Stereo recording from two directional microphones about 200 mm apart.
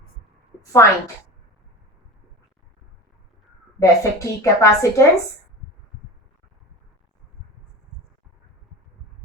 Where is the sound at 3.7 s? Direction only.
15° left (ahead or behind).